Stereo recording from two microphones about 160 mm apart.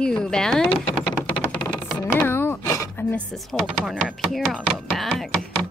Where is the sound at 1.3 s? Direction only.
10° left (ahead or behind).